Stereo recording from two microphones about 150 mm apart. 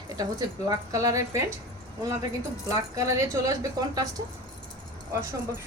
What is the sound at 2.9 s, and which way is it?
Speech, 20° right (ahead or behind).